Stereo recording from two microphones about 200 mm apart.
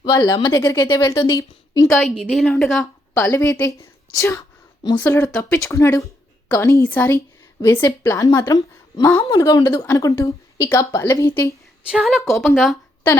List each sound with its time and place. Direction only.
0.1 s a woman's voice: 15° left (ahead or behind)
2.2 s a woman's voice: centre (ahead or behind)
3.2 s a woman's voice: 15° left (ahead or behind)
11.9 s a woman's voice: 5° right (ahead or behind)